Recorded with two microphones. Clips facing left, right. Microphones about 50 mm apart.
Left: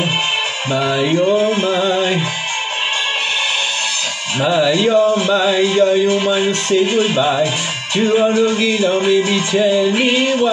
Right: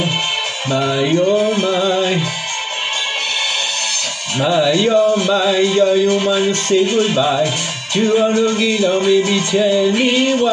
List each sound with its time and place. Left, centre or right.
0.7 s music: centre
1.4 s speech: left
1.8 s music: centre
4.4 s music: centre
5.0 s a sound: left
5.3 s chant: centre
5.9 s speech: left
6.7 s music: centre